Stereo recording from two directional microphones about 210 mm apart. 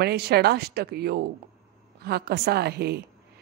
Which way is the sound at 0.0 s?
50° right (ahead or behind).